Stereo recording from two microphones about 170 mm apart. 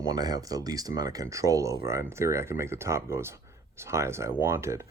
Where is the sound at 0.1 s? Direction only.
25° right (ahead or behind).